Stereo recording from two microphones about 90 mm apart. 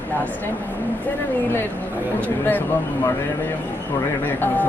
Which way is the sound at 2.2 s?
20° left (ahead or behind).